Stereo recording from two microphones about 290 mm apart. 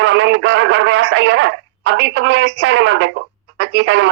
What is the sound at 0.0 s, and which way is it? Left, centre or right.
A man's voice, right.